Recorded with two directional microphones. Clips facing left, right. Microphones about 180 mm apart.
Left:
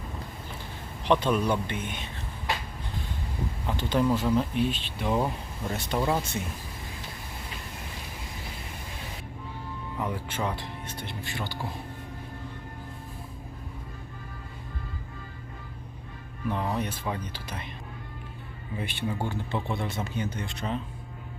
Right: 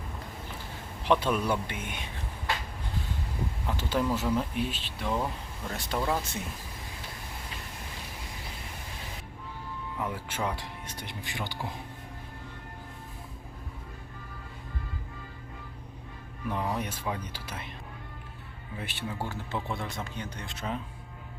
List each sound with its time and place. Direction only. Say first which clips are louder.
1.0 s speech: left 2 dB; 5° right (ahead or behind)
3.7 s speech: left 4 dB; 5° right (ahead or behind)
5.0 s speech: left 4 dB; 15° left (ahead or behind)
5.7 s speech: left 3 dB; centre (ahead or behind)
10.0 s speech: left 2 dB; 5° right (ahead or behind)
16.7 s speech: left 2 dB; 10° right (ahead or behind)
18.8 s speech: left 4 dB; centre (ahead or behind)